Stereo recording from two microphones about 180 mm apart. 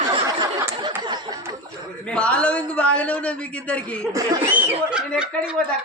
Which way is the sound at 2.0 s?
5° left (ahead or behind).